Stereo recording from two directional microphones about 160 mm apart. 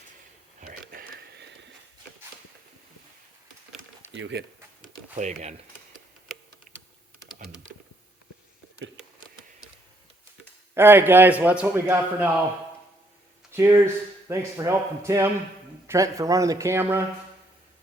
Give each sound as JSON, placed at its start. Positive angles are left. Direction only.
{"t": 0.6, "sound": "a sound", "side_deg": -65}
{"t": 4.3, "sound": "speech", "side_deg": -90}
{"t": 5.1, "sound": "speech", "side_deg": -45}
{"t": 10.8, "sound": "speech", "side_deg": -15}
{"t": 13.5, "sound": "speech", "side_deg": -15}